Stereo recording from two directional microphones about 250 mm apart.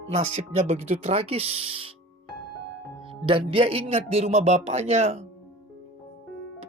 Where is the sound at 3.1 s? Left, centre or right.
Right.